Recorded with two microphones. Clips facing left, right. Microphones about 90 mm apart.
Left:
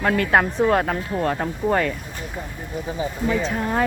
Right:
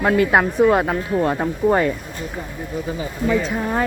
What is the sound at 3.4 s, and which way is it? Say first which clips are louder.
Speech: right 1 dB; 5° right (ahead or behind).